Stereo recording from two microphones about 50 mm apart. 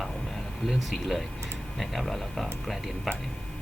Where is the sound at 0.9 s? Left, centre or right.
Centre.